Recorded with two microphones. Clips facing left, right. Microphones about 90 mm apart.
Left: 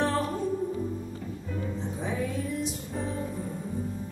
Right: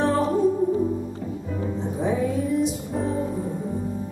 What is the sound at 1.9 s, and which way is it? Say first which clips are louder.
Music: right 9 dB; 10° right (ahead or behind).